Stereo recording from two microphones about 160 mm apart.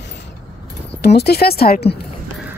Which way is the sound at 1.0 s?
90° left.